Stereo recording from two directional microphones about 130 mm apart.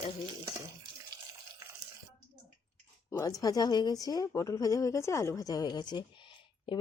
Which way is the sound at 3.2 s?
30° left (ahead or behind).